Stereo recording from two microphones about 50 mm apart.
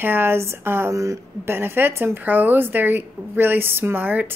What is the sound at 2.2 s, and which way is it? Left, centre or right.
A woman's voice, right.